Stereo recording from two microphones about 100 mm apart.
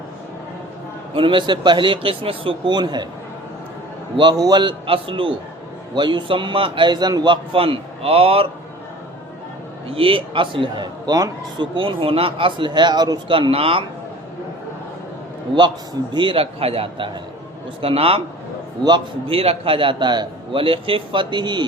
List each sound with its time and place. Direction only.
1.1 s a man's voice: 55° right (ahead or behind)
4.2 s a man's voice: 45° right (ahead or behind)
4.9 s a man's voice: 60° right (ahead or behind); by 7.3 s 45° right (ahead or behind)
7.5 s a man's voice: 65° right (ahead or behind)
9.9 s a man's voice: 65° right (ahead or behind)
11.1 s a man's voice: 45° right (ahead or behind)
13.3 s a man's voice: 65° right (ahead or behind)
16.1 s a man's voice: 60° right (ahead or behind)
18.8 s a man's voice: 50° right (ahead or behind)
19.3 s a man's voice: 75° right (ahead or behind); by 21.7 s 50° right (ahead or behind)